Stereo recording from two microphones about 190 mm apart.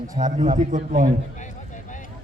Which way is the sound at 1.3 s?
40° left (ahead or behind).